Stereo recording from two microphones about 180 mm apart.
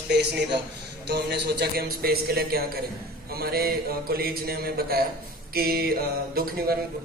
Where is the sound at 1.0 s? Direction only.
70° right (ahead or behind).